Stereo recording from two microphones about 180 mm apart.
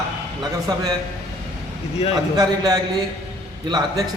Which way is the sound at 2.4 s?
20° right (ahead or behind).